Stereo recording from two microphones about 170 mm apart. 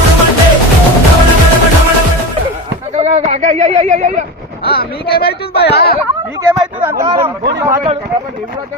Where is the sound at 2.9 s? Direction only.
40° right (ahead or behind).